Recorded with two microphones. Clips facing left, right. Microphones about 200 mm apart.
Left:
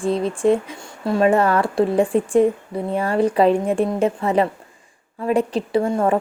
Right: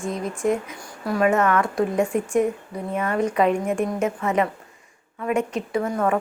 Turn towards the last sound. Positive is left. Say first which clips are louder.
# left 4 dB
turn(degrees=30)  # may be behind; listen again after turning